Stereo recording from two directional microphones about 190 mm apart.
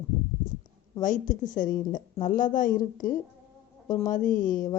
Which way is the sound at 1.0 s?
40° left (ahead or behind).